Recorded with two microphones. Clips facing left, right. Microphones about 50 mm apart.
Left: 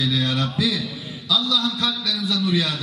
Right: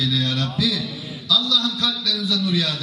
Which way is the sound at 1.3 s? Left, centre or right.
Centre.